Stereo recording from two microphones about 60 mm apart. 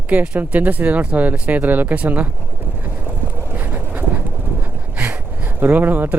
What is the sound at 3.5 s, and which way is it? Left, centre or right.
Pigeon, right.